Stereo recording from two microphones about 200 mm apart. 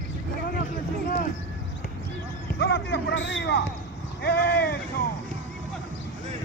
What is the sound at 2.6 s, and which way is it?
Speech, 55° left (ahead or behind).